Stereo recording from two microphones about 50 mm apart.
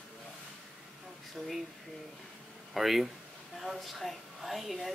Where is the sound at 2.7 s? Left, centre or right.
Centre.